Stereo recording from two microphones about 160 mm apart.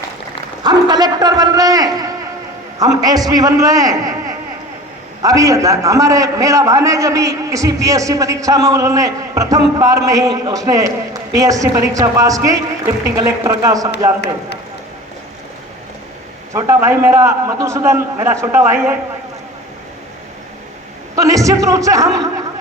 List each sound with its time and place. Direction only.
0.6 s a man's voice: 25° right (ahead or behind)
16.5 s a man's voice: 20° right (ahead or behind)
21.2 s a man's voice: 20° right (ahead or behind)